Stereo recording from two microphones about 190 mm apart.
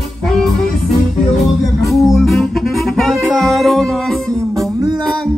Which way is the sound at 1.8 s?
Centre (ahead or behind).